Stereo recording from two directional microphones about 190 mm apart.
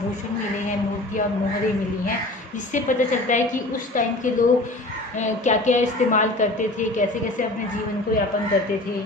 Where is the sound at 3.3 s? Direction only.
40° left (ahead or behind).